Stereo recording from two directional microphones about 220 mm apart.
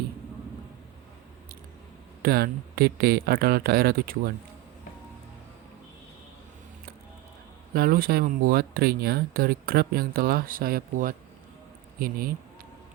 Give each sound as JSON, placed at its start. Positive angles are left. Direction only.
{"t": 2.2, "sound": "speech", "side_deg": -45}
{"t": 7.7, "sound": "speech", "side_deg": -40}